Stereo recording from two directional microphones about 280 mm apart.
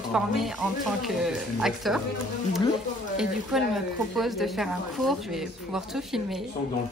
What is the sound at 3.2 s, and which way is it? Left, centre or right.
Speech, centre.